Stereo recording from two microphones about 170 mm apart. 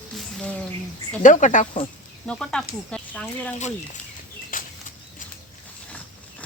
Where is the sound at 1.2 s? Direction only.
50° left (ahead or behind).